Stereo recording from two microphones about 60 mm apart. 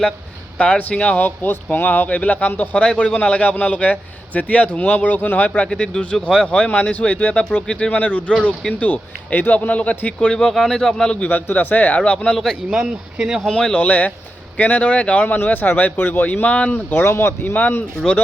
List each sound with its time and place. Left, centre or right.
0.6 s speech: left
1.2 s speech: left
2.8 s speech: centre
5.6 s speech: centre
10.2 s speech: centre
11.1 s speech: left
12.7 s speech: centre
13.5 s speech: centre
16.7 s speech: left
17.5 s speech: left